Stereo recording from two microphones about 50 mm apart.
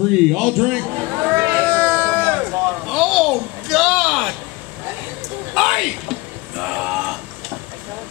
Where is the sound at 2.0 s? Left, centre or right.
Right.